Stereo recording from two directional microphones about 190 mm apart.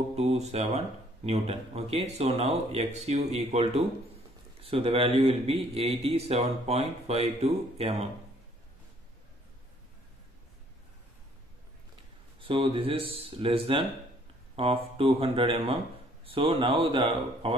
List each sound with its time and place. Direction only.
0.1 s speech: 35° right (ahead or behind)
12.4 s speech: 30° right (ahead or behind)